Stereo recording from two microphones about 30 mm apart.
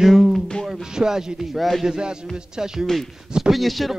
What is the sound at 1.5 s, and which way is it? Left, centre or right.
Speech, centre.